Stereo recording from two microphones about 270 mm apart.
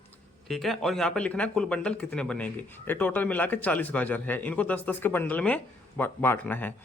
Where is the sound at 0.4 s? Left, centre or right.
Centre.